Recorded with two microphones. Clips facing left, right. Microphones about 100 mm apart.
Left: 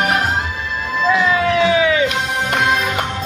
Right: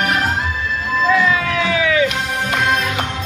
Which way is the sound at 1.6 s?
25° left (ahead or behind).